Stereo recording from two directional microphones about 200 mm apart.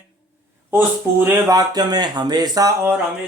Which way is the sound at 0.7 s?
10° right (ahead or behind).